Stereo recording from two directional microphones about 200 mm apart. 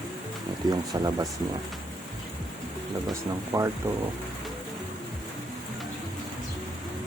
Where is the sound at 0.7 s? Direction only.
20° right (ahead or behind).